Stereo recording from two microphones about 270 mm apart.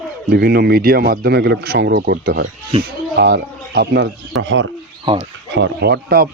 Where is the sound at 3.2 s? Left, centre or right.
Right.